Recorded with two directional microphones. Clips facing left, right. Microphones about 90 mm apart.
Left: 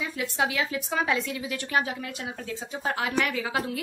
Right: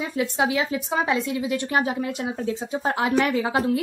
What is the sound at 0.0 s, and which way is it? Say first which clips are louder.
Speech: right 5 dB; 30° right (ahead or behind).